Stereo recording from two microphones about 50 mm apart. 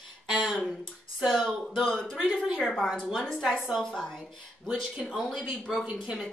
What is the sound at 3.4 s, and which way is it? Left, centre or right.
A woman's voice, centre.